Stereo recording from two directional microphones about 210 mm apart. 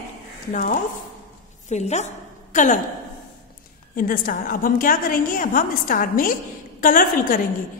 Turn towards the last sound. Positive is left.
turn(degrees=40)  # may be behind; listen again after turning